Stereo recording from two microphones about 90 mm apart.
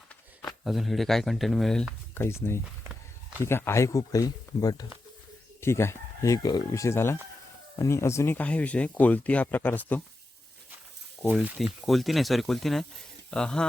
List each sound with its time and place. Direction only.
0.6 s speech: centre (ahead or behind)
2.1 s speech: 25° left (ahead or behind); by 4.9 s 45° left (ahead or behind)
5.5 s speech: 30° left (ahead or behind)
6.7 s speech: 30° left (ahead or behind)
8.4 s speech: 15° left (ahead or behind)
11.2 s speech: centre (ahead or behind)